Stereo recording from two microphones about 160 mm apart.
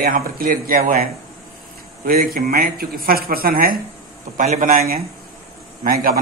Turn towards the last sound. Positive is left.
turn(degrees=-65)  # may be behind; listen again after turning